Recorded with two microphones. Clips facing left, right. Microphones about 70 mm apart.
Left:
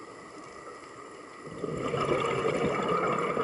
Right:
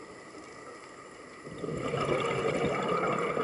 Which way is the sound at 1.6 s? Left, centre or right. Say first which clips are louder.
Left 2 dB; centre.